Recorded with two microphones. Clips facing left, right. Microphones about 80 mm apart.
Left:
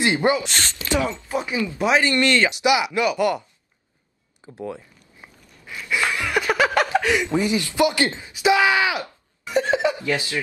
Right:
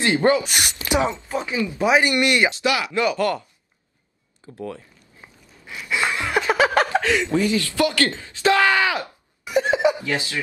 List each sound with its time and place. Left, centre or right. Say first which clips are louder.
0.0 s speech: right 2 dB; centre
0.4 s speech: right 1 dB; centre
0.7 s a sound: right 2 dB; right
1.3 s speech: left 1 dB; centre
2.0 s speech: left 1 dB; centre
2.5 s speech: left 2 dB; centre
4.6 s a sound: left 1 dB; centre
5.7 s a sound: even; centre
7.0 s speech: right 1 dB; centre
9.0 s speech: even; centre